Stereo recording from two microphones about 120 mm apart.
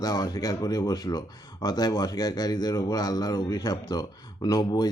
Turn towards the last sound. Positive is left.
turn(degrees=35)  # may be behind; listen again after turning